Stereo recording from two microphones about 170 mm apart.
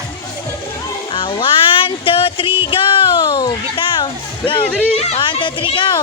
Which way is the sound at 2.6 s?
30° left (ahead or behind).